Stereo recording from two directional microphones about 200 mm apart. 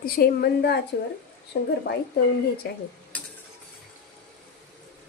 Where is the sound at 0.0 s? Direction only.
50° left (ahead or behind).